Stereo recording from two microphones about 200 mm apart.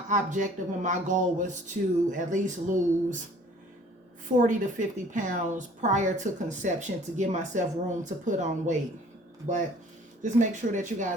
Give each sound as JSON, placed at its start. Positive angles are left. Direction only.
{"t": 0.1, "sound": "a woman's voice", "side_deg": -40}
{"t": 4.4, "sound": "a woman's voice", "side_deg": -40}
{"t": 10.2, "sound": "a woman's voice", "side_deg": -40}